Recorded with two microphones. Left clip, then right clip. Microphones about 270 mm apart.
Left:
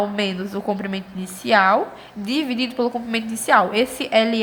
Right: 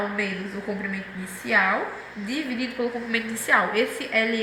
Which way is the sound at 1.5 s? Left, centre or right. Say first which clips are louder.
Left 6 dB; left.